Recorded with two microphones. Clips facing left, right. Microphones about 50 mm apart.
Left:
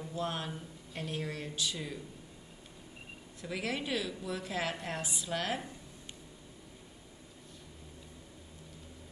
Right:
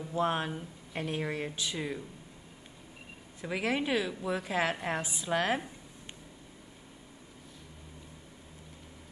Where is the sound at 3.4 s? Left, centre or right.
Centre.